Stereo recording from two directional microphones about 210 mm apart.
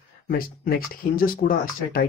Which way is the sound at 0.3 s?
45° left (ahead or behind).